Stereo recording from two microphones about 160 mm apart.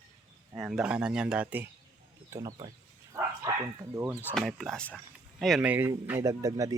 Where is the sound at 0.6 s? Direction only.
5° right (ahead or behind).